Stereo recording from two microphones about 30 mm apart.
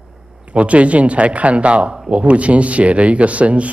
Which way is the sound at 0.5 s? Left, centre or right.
Right.